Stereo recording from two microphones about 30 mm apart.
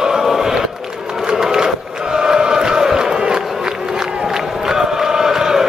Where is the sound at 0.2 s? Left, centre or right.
Centre.